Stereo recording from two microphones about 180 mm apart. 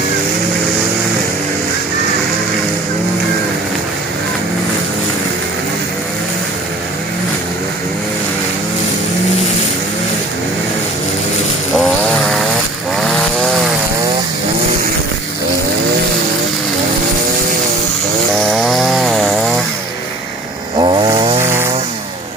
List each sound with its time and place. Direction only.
11.8 s vehicle: centre (ahead or behind)
18.5 s chainsaw: centre (ahead or behind)
20.7 s chainsaw: 25° right (ahead or behind)